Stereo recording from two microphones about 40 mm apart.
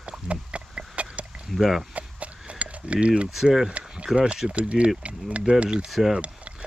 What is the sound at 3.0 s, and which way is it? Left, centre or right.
Speech, right.